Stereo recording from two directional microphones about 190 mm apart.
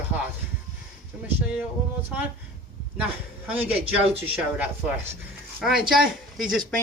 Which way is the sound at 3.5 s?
10° right (ahead or behind).